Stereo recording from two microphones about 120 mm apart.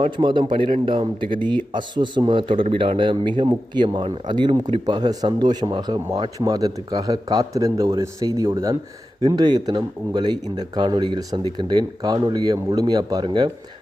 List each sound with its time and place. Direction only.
0.0 s speech: 40° right (ahead or behind)